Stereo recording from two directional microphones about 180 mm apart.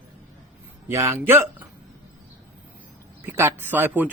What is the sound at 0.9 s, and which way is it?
Speech, 15° right (ahead or behind).